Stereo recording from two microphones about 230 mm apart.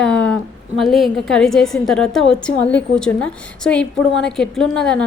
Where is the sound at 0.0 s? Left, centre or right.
Centre.